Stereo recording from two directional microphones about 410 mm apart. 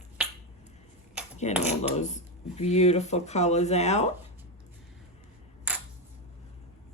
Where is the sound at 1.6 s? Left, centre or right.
Centre.